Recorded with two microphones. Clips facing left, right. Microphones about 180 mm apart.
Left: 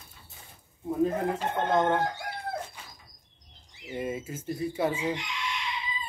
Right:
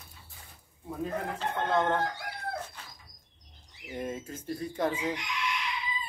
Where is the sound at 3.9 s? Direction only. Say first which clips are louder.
Left 3 dB; 5° left (ahead or behind).